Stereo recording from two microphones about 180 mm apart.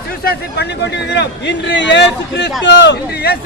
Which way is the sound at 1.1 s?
80° left.